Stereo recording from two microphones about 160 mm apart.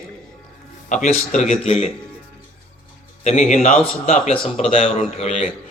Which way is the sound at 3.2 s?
45° left (ahead or behind).